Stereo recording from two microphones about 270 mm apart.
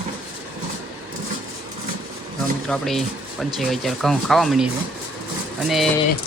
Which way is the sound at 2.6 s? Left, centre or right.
Centre.